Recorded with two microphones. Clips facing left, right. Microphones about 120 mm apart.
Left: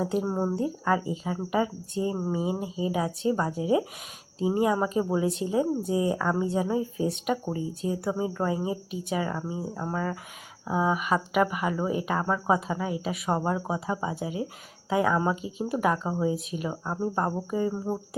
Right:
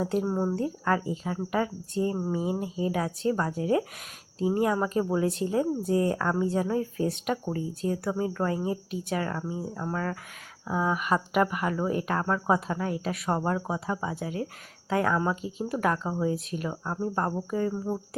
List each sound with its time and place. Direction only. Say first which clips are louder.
0.2 s speech: even; 15° left (ahead or behind)